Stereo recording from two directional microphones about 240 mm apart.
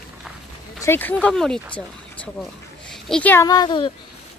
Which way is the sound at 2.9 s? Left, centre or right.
Centre.